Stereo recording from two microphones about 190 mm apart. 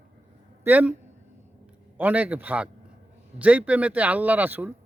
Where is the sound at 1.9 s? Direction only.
10° right (ahead or behind).